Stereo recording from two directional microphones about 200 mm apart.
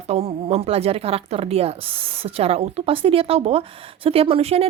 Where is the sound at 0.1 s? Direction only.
30° right (ahead or behind).